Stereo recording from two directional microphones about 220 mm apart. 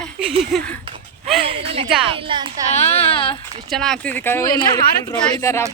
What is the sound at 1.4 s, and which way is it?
A woman's voice, 25° right (ahead or behind).